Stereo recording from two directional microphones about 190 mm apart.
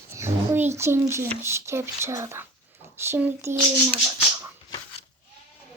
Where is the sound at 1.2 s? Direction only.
15° right (ahead or behind).